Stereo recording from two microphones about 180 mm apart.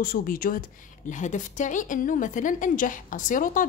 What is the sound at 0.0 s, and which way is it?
A woman's voice, 50° left (ahead or behind).